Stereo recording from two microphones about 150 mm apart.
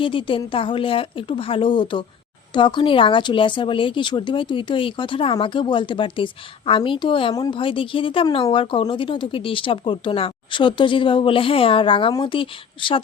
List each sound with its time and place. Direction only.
0.0 s speech: 35° left (ahead or behind)